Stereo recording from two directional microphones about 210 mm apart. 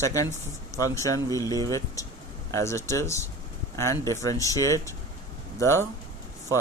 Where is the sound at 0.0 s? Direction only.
15° left (ahead or behind).